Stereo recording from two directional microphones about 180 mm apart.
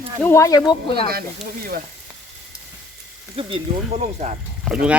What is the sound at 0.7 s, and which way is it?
Speech, 30° left (ahead or behind).